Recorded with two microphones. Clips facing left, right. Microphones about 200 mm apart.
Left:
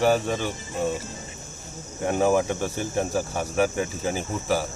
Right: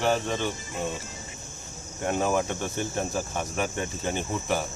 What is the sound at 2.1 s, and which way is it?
Cricket, 10° left (ahead or behind).